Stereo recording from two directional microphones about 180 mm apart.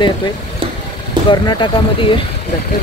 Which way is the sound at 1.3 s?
25° left (ahead or behind).